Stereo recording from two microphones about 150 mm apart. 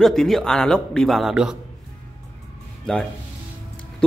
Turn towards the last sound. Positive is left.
turn(degrees=5)  # may be behind; listen again after turning